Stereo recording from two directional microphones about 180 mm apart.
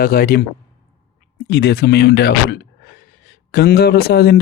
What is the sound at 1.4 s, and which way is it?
A man's voice, 65° left (ahead or behind).